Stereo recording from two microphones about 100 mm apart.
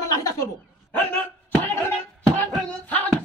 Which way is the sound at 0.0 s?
35° left (ahead or behind).